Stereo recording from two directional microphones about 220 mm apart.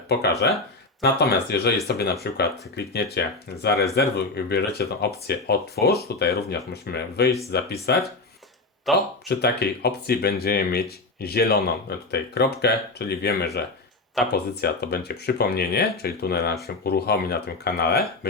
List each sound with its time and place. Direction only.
0.1 s speech: 50° left (ahead or behind)
8.9 s speech: centre (ahead or behind)
9.3 s speech: 45° left (ahead or behind)